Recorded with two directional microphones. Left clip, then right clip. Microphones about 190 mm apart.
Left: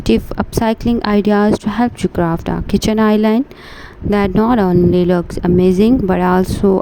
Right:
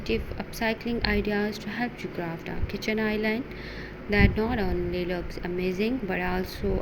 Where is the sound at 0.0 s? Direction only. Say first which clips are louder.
Left 14 dB; 60° left (ahead or behind).